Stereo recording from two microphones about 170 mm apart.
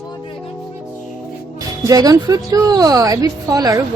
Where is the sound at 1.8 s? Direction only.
20° right (ahead or behind).